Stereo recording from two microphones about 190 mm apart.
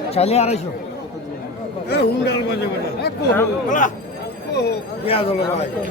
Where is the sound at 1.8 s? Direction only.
60° left (ahead or behind).